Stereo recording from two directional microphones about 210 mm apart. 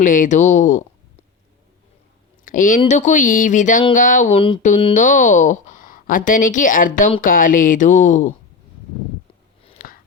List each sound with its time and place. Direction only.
0.0 s a woman's voice: 40° left (ahead or behind)
2.4 s a woman's voice: 40° left (ahead or behind)
4.4 s a woman's voice: 25° left (ahead or behind)
9.7 s a sound: 45° left (ahead or behind)